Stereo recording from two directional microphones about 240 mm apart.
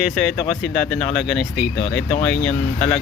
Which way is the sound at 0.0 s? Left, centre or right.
Centre.